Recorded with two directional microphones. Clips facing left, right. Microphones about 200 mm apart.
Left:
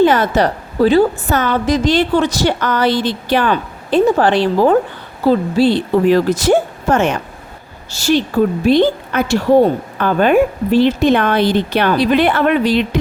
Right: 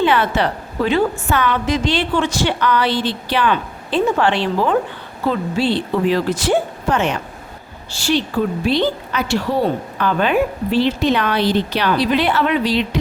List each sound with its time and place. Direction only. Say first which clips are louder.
0.0 s a woman's voice: left 5 dB; 40° left (ahead or behind)